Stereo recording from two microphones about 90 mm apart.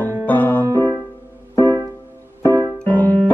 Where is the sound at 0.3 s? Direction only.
20° left (ahead or behind).